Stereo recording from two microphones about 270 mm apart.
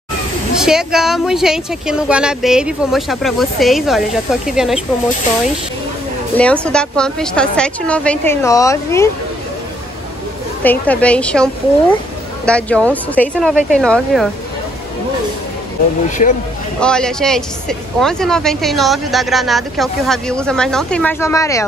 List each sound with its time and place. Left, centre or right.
0.6 s speech: centre
6.3 s speech: centre
10.6 s speech: centre
16.2 s speech: left
16.8 s speech: centre